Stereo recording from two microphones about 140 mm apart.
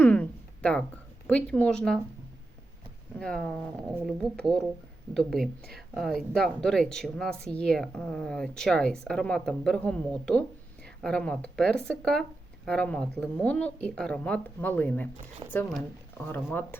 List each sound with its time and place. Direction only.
0.0 s a sound: 15° left (ahead or behind)
1.3 s a woman's voice: 10° left (ahead or behind)
3.2 s a woman's voice: 5° left (ahead or behind)
15.4 s speech: 35° right (ahead or behind)
16.2 s a woman's voice: 15° left (ahead or behind)